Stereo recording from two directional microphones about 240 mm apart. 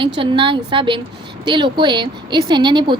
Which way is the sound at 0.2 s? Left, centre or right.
Right.